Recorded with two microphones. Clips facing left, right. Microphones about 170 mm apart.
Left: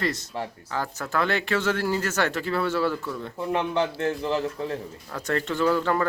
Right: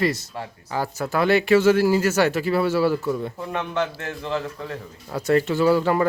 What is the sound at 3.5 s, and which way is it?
Speech, 30° left (ahead or behind).